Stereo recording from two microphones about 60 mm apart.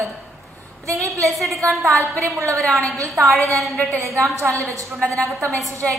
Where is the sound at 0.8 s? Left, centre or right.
Right.